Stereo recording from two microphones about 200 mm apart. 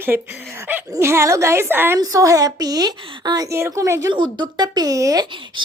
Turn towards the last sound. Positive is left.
turn(degrees=-25)  # may be behind; listen again after turning